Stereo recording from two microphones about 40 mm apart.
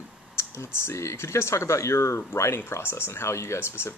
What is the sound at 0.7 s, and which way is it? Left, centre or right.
Speech, left.